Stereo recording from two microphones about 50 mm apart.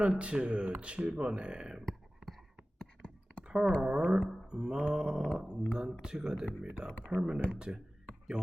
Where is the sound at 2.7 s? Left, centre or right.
Centre.